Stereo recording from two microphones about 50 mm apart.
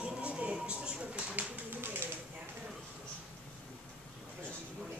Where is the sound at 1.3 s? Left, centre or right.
Right.